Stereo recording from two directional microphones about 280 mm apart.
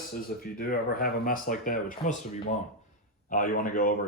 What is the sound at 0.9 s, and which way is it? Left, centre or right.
Speech, left.